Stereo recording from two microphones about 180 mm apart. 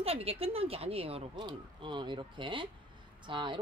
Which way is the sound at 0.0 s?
35° right (ahead or behind).